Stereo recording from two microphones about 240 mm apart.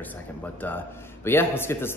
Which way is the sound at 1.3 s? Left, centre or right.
Centre.